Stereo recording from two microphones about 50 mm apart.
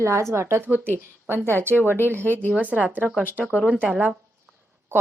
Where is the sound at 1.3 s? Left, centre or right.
Right.